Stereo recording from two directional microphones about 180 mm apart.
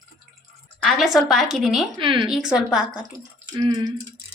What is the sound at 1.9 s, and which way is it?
Speech, 25° right (ahead or behind).